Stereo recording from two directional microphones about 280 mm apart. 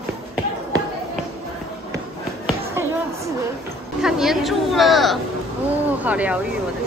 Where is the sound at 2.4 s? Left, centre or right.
Centre.